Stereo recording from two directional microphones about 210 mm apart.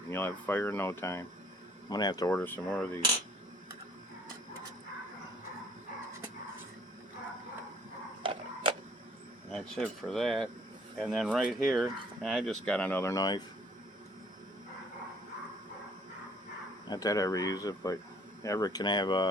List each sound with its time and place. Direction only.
0.1 s speech: 10° left (ahead or behind)
8.2 s a sound: 25° right (ahead or behind)
9.5 s speech: 5° left (ahead or behind)
16.9 s speech: 15° left (ahead or behind)